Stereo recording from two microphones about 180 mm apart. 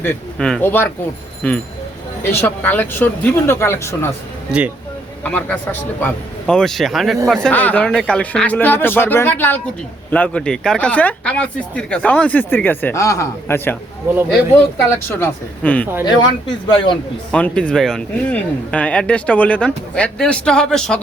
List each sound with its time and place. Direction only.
0.0 s speech: 5° left (ahead or behind)
5.2 s speech: 5° left (ahead or behind)
14.8 s speech: 15° left (ahead or behind)
16.0 s speech: 25° left (ahead or behind)
17.3 s speech: 5° left (ahead or behind)